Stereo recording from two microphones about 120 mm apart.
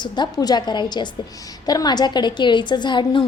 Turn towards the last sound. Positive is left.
turn(degrees=40)  # may be behind; listen again after turning